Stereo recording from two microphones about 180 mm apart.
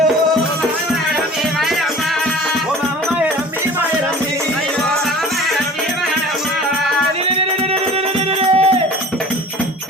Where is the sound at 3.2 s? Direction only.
10° right (ahead or behind).